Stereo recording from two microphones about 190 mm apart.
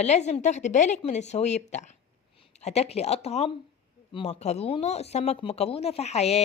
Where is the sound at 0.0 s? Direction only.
35° left (ahead or behind).